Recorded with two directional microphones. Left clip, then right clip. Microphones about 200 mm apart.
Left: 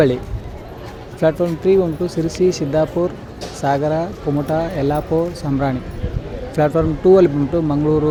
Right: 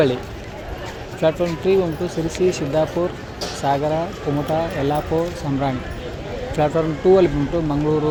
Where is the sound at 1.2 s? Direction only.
30° left (ahead or behind).